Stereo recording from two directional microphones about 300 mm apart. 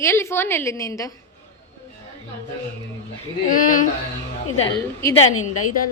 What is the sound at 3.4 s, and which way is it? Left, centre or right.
Speech, left.